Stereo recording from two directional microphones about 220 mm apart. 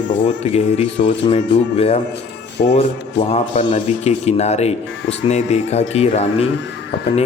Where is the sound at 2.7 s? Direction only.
25° left (ahead or behind).